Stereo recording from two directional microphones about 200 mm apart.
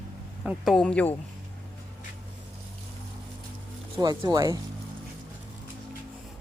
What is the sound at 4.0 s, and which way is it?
Speech, 20° right (ahead or behind).